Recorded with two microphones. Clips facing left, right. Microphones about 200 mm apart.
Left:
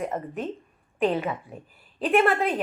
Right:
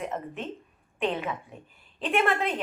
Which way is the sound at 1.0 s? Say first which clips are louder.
Left 5 dB; 35° left (ahead or behind).